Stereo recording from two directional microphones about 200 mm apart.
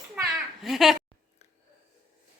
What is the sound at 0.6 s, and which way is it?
Speech, centre (ahead or behind).